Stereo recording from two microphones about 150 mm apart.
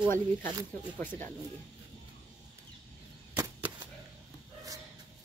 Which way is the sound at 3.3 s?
10° right (ahead or behind).